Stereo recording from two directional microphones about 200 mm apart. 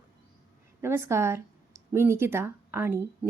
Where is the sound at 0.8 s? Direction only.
15° right (ahead or behind).